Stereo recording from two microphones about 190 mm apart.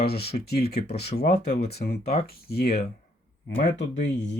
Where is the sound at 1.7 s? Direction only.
55° left (ahead or behind).